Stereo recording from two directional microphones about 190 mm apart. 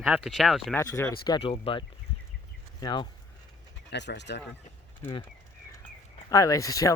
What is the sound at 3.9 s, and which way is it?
Speech, 65° left (ahead or behind).